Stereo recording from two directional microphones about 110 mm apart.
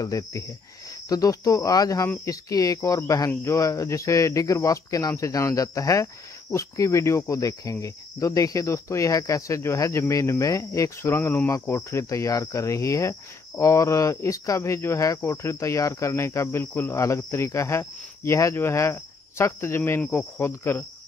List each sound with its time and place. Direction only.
0.0 s speech: 30° left (ahead or behind)